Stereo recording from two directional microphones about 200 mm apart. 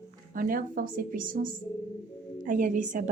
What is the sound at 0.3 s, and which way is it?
A woman's voice, 45° right (ahead or behind).